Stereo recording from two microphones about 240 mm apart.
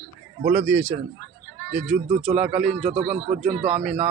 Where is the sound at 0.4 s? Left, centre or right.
Centre.